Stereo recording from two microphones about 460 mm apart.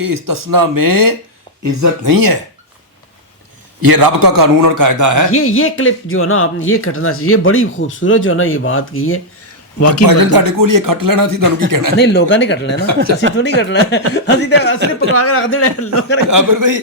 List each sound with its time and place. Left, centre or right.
0.0 s speech: right
3.8 s speech: right
5.3 s speech: left
10.1 s speech: right
11.9 s speech: left
16.3 s a man's voice: right